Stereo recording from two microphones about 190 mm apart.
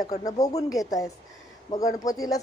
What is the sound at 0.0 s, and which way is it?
Speech, 20° left (ahead or behind).